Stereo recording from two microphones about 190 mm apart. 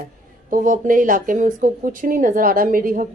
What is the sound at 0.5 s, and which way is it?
Speech, 45° right (ahead or behind).